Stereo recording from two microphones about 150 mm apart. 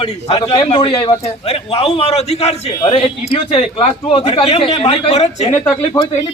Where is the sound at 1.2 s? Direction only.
40° left (ahead or behind).